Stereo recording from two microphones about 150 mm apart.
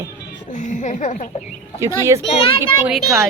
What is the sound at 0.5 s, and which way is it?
Speech, 55° left (ahead or behind).